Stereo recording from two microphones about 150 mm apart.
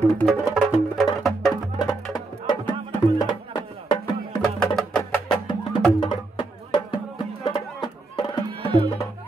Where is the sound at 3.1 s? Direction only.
30° left (ahead or behind).